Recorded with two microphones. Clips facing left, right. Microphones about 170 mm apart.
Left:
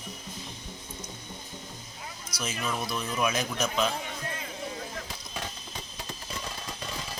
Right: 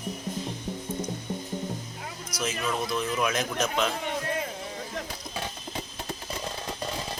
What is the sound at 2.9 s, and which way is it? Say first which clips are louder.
Speech: right 1 dB; centre (ahead or behind).